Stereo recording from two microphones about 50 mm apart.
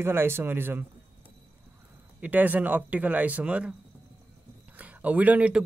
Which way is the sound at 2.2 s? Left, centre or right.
Right.